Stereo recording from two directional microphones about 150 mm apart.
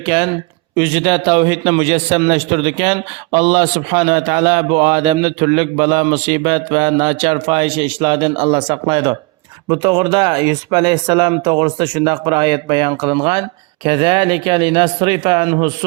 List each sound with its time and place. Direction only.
0.0 s a man's voice: 35° right (ahead or behind)